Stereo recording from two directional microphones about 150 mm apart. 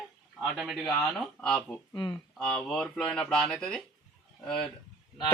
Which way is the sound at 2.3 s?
5° left (ahead or behind).